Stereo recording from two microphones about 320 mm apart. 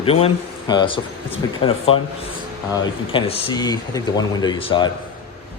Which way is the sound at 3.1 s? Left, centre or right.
Centre.